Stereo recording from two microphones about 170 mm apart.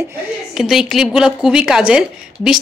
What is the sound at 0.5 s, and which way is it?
Speech, centre (ahead or behind).